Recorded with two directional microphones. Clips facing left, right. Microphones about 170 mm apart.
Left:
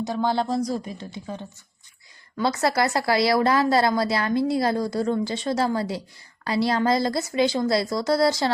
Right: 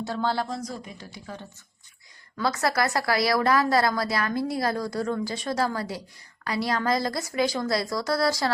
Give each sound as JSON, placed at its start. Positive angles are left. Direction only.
{"t": 0.0, "sound": "speech", "side_deg": 15}
{"t": 0.4, "sound": "speech", "side_deg": 35}